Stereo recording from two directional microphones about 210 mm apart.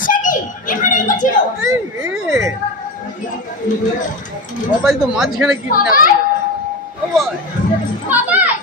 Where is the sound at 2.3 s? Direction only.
15° right (ahead or behind).